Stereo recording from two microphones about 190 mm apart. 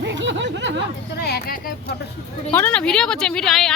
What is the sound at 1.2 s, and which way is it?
Speech, 55° left (ahead or behind).